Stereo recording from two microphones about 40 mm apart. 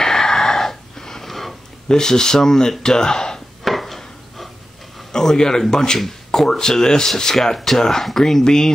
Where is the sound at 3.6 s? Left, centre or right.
Centre.